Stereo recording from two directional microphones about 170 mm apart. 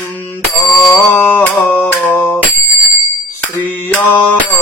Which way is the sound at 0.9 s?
10° left (ahead or behind).